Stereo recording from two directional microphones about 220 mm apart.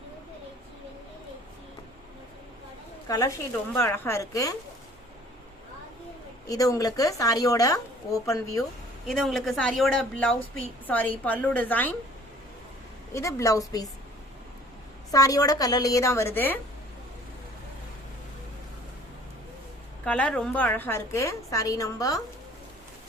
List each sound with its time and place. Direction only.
3.1 s a woman's voice: 15° left (ahead or behind)
6.5 s a woman's voice: 15° left (ahead or behind)
9.0 s a woman's voice: centre (ahead or behind)
13.1 s a woman's voice: 15° left (ahead or behind)
15.1 s a woman's voice: 15° left (ahead or behind)
20.1 s a woman's voice: 5° left (ahead or behind)